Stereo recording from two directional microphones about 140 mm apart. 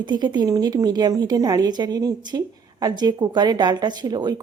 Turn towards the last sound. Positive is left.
turn(degrees=-30)  # may be behind; listen again after turning